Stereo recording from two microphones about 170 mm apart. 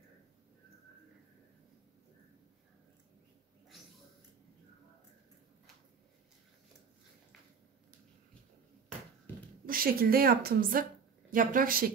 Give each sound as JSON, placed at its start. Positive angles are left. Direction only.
{"t": 9.7, "sound": "a woman's voice", "side_deg": -60}